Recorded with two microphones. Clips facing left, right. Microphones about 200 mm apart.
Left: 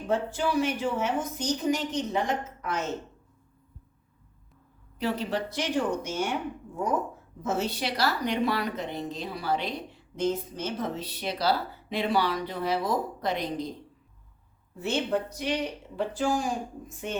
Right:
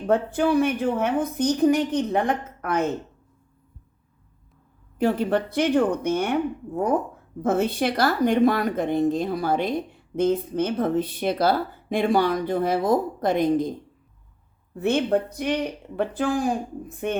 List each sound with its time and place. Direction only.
0.1 s a woman's voice: 55° right (ahead or behind)
4.9 s a woman's voice: 50° right (ahead or behind)
7.4 s a woman's voice: 55° right (ahead or behind)
14.8 s a woman's voice: 55° right (ahead or behind)